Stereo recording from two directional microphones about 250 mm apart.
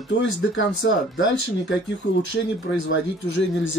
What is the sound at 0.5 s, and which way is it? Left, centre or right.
Speech, left.